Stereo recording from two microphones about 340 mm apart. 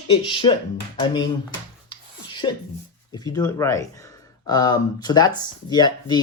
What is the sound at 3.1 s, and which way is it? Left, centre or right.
Speech, centre.